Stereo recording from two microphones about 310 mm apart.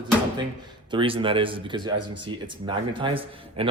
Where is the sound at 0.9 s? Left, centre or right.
Centre.